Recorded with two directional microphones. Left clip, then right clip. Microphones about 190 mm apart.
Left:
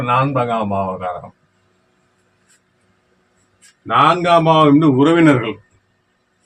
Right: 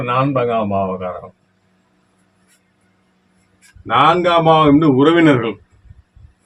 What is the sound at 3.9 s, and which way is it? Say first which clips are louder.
A man's voice: even; 15° right (ahead or behind).